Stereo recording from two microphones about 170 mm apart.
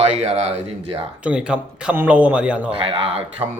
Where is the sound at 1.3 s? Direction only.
5° right (ahead or behind).